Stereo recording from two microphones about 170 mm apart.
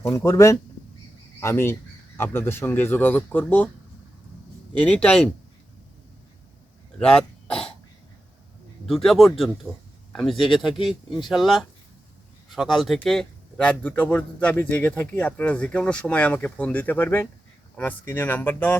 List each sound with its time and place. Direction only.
0.1 s a man's voice: 15° left (ahead or behind)
4.8 s a man's voice: 5° left (ahead or behind)
7.0 s cough: 5° left (ahead or behind)
8.9 s a man's voice: centre (ahead or behind)